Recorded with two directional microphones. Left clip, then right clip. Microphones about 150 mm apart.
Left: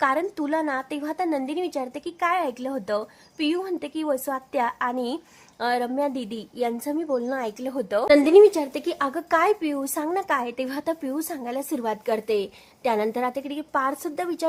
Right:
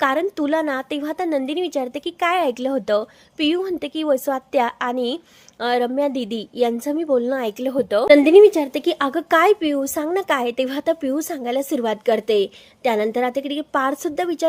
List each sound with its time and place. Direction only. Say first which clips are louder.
0.0 s a woman's voice: right 4 dB; 25° right (ahead or behind)